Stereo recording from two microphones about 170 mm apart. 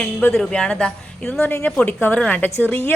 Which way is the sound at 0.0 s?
5° left (ahead or behind).